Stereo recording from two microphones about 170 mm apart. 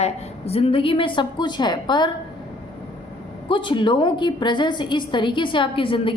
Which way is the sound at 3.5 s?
30° left (ahead or behind).